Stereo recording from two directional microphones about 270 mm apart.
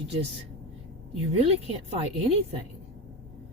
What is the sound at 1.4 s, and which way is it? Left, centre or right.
Speech, right.